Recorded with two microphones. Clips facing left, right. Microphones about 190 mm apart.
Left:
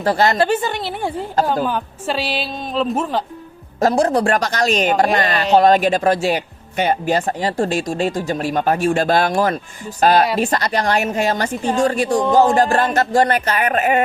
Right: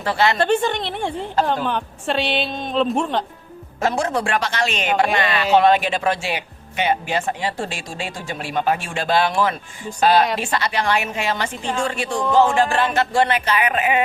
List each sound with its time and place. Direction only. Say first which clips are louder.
0.0 s a woman's voice: left 3 dB; 40° left (ahead or behind)
0.3 s a woman's voice: left 1 dB; 5° left (ahead or behind)
3.8 s a woman's voice: left 6 dB; 35° left (ahead or behind)